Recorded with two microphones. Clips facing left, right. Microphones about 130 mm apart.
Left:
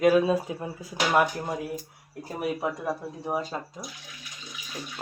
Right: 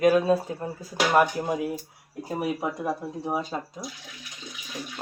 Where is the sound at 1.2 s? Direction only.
Centre (ahead or behind).